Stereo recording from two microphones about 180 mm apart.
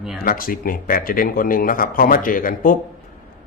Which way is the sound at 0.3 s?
50° left (ahead or behind).